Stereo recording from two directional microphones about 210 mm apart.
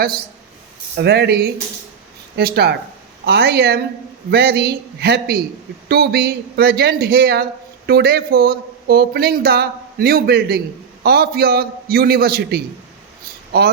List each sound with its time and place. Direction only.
0.9 s speech: 50° right (ahead or behind)